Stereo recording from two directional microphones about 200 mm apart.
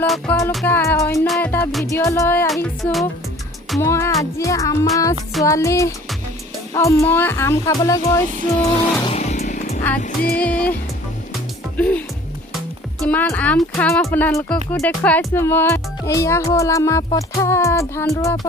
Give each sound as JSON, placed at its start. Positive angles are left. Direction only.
{"t": 0.0, "sound": "speech", "side_deg": 10}
{"t": 1.3, "sound": "music", "side_deg": 10}
{"t": 1.8, "sound": "speech", "side_deg": 15}
{"t": 9.0, "sound": "music", "side_deg": 35}
{"t": 10.0, "sound": "music", "side_deg": 50}
{"t": 10.4, "sound": "speech", "side_deg": 5}
{"t": 11.8, "sound": "speech", "side_deg": 5}